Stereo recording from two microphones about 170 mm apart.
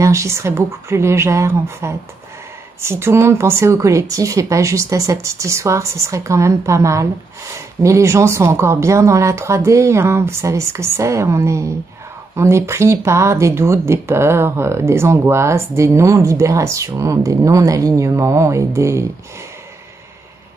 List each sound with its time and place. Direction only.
0.0 s speech: 15° right (ahead or behind)